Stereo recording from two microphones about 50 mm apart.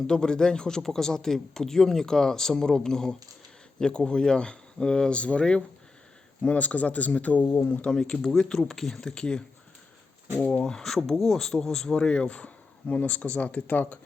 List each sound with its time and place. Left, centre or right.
0.1 s a man's voice: centre
7.9 s a man's voice: centre
10.6 s a man's voice: centre; by 14.0 s left